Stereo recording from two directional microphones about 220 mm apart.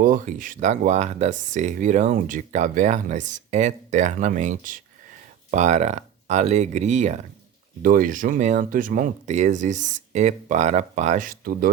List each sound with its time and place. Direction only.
0.0 s speech: 40° right (ahead or behind)